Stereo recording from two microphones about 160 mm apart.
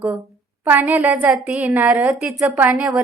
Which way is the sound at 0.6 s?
10° right (ahead or behind).